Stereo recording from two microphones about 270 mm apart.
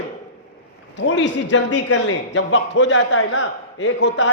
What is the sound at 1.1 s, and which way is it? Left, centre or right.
A man's voice, left.